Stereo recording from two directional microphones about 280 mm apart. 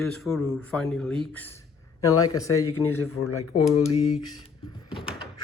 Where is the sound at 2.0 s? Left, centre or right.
Centre.